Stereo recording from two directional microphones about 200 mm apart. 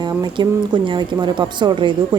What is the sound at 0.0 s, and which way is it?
Speech, 20° right (ahead or behind).